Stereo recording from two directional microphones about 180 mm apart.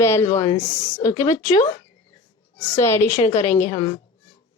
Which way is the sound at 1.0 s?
20° left (ahead or behind).